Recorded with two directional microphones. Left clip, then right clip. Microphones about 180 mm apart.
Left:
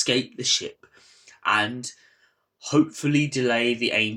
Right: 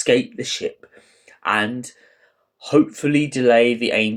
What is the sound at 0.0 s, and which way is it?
Speech, 20° right (ahead or behind).